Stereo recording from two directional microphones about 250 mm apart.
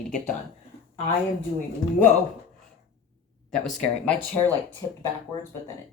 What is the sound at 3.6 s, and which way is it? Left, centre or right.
Speech, centre.